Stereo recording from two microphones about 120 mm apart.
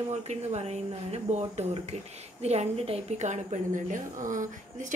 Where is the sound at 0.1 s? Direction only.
65° right (ahead or behind).